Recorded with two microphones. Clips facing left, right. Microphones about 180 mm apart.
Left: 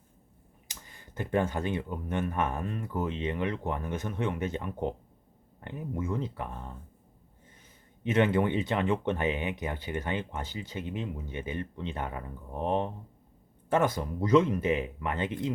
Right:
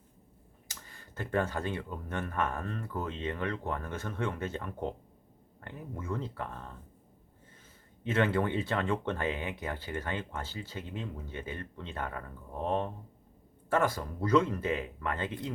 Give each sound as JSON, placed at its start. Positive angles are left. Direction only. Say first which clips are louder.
{"t": 0.7, "sound": "speech", "louder": "left 2 dB", "side_deg": 20}
{"t": 8.0, "sound": "speech", "louder": "left 3 dB", "side_deg": 20}